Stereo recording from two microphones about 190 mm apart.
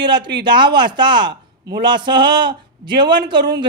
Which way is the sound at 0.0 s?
25° right (ahead or behind).